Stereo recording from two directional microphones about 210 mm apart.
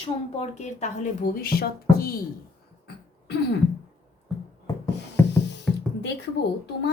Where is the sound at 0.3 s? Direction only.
35° left (ahead or behind).